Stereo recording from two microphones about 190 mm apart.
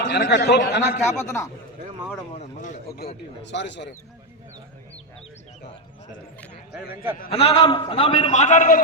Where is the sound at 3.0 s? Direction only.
60° left (ahead or behind).